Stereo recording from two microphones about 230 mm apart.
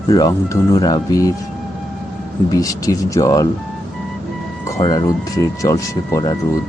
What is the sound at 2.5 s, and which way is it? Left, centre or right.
Speech, centre.